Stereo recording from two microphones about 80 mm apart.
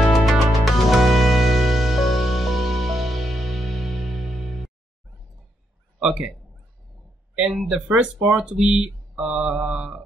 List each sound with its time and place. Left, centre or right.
0.1 s music: centre
5.9 s a sound: centre
7.3 s speech: centre
8.0 s speech: centre